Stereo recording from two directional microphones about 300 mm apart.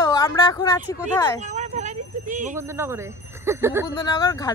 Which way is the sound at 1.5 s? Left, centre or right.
Right.